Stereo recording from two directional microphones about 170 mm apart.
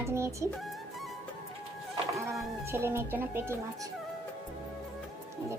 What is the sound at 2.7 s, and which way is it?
Speech, 15° right (ahead or behind).